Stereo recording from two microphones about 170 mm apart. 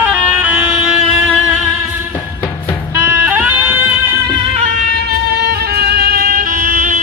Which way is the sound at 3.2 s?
10° right (ahead or behind).